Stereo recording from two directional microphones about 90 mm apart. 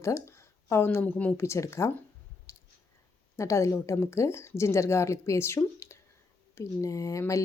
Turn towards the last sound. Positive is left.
turn(degrees=35)  # may be behind; listen again after turning